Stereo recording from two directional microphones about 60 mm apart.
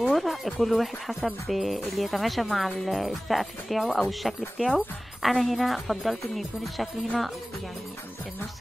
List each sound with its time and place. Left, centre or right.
0.0 s speech: centre